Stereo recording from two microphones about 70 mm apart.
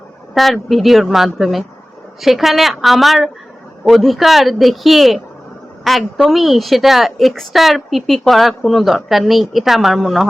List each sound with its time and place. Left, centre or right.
0.3 s a woman's voice: centre